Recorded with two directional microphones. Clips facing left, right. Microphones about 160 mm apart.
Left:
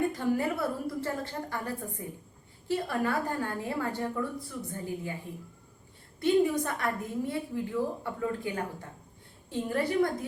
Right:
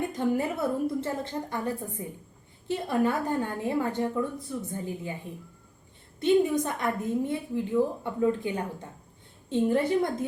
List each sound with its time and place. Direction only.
0.1 s a woman's voice: 20° right (ahead or behind)
6.1 s a woman's voice: 20° right (ahead or behind)